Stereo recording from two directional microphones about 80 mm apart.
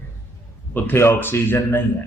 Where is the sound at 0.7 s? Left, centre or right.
Left.